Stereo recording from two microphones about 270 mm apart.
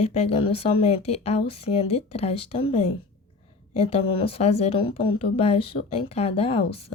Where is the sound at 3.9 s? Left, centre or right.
Left.